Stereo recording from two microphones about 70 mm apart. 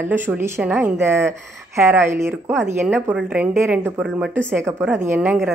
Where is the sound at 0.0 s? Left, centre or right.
Right.